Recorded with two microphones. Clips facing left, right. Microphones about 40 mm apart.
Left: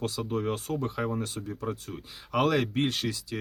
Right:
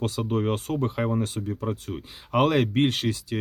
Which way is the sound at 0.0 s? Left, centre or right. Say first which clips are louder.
Right 4 dB; right.